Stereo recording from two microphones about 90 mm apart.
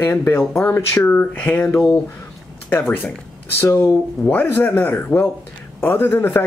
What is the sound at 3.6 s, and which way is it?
Speech, 25° left (ahead or behind).